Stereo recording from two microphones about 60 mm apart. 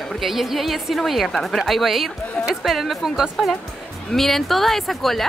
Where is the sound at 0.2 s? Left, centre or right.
Centre.